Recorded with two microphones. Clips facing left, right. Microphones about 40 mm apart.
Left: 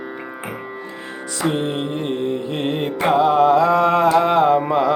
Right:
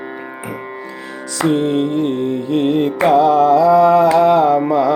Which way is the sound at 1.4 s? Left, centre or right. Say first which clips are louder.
Right 6 dB; centre.